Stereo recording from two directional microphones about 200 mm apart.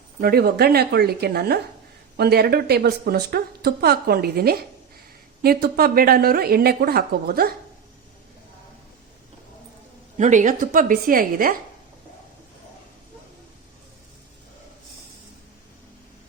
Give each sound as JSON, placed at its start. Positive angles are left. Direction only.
{"t": 0.2, "sound": "a woman's voice", "side_deg": -50}
{"t": 10.2, "sound": "a woman's voice", "side_deg": -40}